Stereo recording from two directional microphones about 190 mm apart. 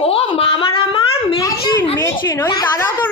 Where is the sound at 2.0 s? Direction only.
15° left (ahead or behind).